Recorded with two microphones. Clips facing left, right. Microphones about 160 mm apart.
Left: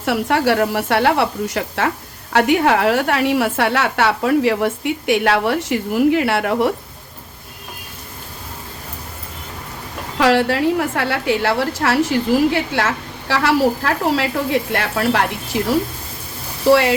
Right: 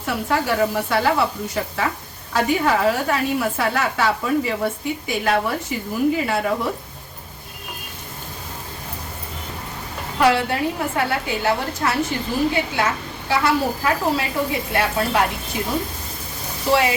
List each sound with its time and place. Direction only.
0.0 s a woman's voice: 75° left (ahead or behind)
10.2 s a woman's voice: 90° left